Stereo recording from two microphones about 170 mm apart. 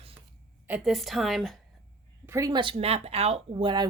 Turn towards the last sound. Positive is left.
turn(degrees=-30)  # may be behind; listen again after turning